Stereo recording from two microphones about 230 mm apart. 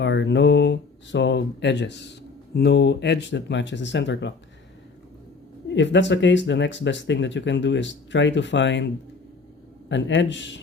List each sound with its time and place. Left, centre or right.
0.0 s speech: left
5.6 s speech: left
9.9 s speech: left